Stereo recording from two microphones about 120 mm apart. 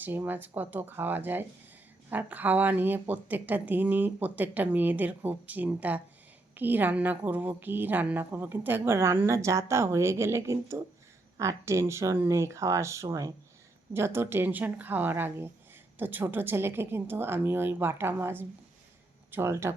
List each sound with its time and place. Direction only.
0.0 s a woman's voice: 15° right (ahead or behind)